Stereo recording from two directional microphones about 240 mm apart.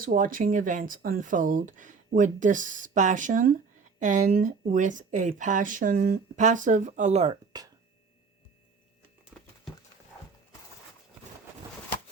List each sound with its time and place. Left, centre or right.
0.0 s speech: right
9.3 s horse: centre